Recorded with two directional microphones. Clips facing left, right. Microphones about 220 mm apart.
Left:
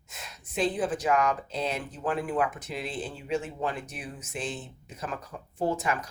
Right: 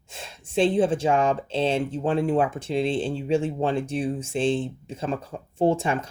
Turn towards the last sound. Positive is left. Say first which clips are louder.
# right 7 dB
turn(degrees=-25)  # may be behind; listen again after turning